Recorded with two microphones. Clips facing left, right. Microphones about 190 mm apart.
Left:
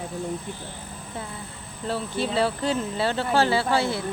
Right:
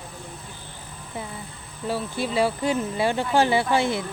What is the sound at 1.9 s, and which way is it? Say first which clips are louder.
Speech: even; 10° right (ahead or behind).